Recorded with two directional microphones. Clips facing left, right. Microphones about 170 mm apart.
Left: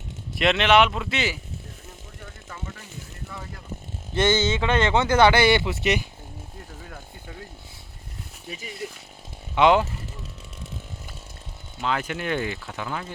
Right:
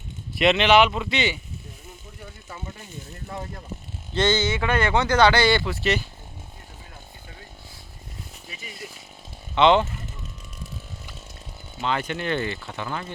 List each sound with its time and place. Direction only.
0.3 s speech: centre (ahead or behind)
4.1 s speech: 20° left (ahead or behind)
9.6 s speech: 10° left (ahead or behind)
11.8 s speech: 5° left (ahead or behind)